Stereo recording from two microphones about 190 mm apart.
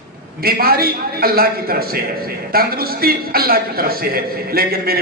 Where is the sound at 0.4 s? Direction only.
50° right (ahead or behind).